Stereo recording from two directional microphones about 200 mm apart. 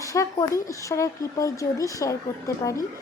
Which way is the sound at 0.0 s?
15° left (ahead or behind).